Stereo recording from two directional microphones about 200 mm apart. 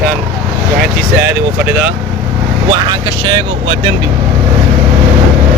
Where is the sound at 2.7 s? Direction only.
25° right (ahead or behind).